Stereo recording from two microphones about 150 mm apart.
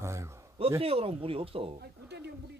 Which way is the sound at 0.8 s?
40° right (ahead or behind).